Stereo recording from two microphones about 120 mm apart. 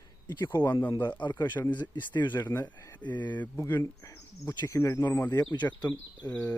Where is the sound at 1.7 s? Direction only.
40° left (ahead or behind).